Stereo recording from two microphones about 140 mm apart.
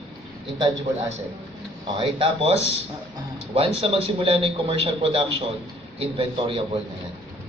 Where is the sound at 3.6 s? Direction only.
45° right (ahead or behind).